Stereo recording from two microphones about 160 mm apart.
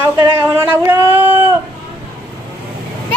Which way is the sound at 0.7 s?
15° right (ahead or behind).